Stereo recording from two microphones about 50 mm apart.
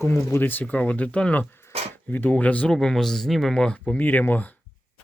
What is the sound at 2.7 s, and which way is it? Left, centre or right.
Speech, centre.